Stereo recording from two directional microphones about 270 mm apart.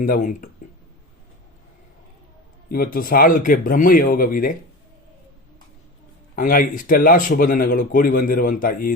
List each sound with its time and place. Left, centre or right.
0.0 s speech: left
2.6 s speech: left
6.3 s speech: left